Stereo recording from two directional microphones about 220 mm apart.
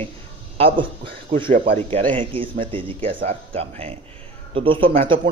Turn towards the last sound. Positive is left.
turn(degrees=-25)  # may be behind; listen again after turning